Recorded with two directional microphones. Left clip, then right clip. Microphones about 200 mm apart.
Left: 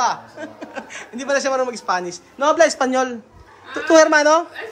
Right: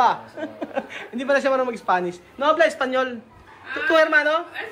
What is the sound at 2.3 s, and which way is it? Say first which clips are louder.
Speech: left 3 dB; 25° left (ahead or behind).